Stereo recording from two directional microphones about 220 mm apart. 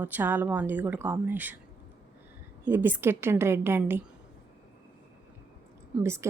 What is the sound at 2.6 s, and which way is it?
Speech, 10° right (ahead or behind).